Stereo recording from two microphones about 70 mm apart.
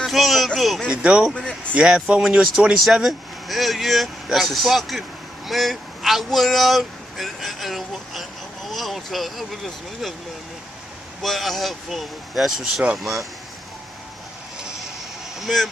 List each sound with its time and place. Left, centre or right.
0.0 s a sound: centre
0.6 s speech: centre
0.8 s speech: centre
1.3 s a sound: centre
1.8 s speech: centre
11.2 s speech: centre
15.4 s speech: centre